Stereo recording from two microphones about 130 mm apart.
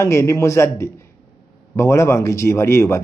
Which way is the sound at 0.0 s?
20° left (ahead or behind).